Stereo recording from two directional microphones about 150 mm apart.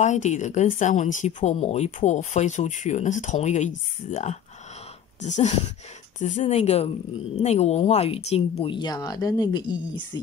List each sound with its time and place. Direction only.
0.0 s speech: 50° left (ahead or behind); by 10.2 s 30° left (ahead or behind)